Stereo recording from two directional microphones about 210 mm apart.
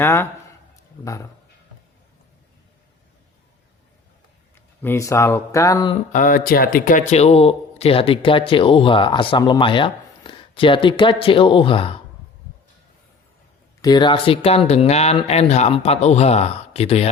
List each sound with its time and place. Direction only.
0.0 s a man's voice: 10° left (ahead or behind)
4.5 s speech: 10° left (ahead or behind)
6.1 s speech: 40° left (ahead or behind); by 11.9 s 25° left (ahead or behind)
13.8 s speech: 20° left (ahead or behind)